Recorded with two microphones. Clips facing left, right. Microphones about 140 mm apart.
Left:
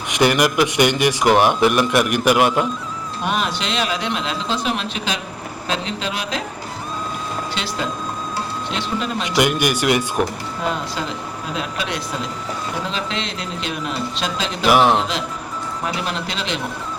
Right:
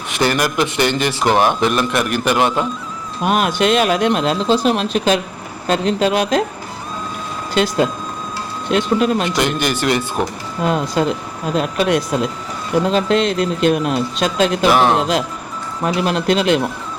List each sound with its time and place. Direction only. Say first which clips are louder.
0.1 s speech: left 1 dB; 15° left (ahead or behind)
3.2 s speech: right 8 dB; 50° right (ahead or behind)
7.5 s speech: right 13 dB; 50° right (ahead or behind)
9.3 s speech: even; 10° left (ahead or behind)
11.0 s speech: right 8 dB; 50° right (ahead or behind)
14.7 s speech: left 2 dB; 10° left (ahead or behind)
15.8 s speech: right 8 dB; 45° right (ahead or behind)